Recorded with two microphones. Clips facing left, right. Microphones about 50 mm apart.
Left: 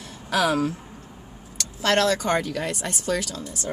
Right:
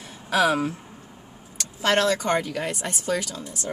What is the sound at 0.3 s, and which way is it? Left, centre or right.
Speech, centre.